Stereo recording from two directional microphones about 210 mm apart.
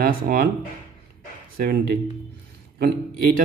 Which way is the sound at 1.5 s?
45° right (ahead or behind).